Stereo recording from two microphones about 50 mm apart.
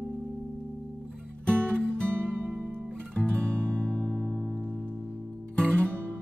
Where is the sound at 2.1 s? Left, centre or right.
Right.